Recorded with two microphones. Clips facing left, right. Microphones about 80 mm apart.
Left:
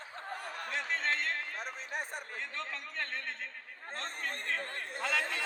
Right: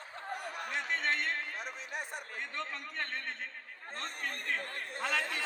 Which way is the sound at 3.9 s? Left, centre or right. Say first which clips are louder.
Left 1 dB; left.